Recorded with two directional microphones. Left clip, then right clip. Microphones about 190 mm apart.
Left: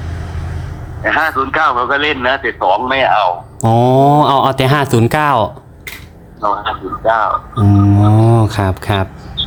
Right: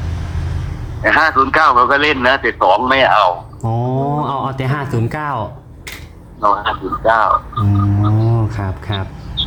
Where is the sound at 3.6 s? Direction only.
50° left (ahead or behind).